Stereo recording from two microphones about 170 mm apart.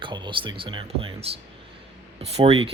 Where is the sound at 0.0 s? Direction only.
30° right (ahead or behind).